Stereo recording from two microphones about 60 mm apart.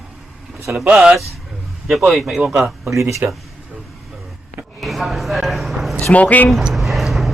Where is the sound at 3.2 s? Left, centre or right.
Right.